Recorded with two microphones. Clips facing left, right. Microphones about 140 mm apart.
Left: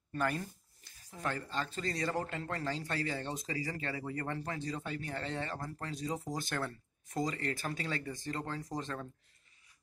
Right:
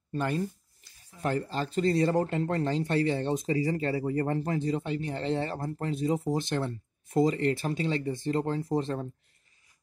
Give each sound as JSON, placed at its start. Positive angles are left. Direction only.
{"t": 0.1, "sound": "speech", "side_deg": -25}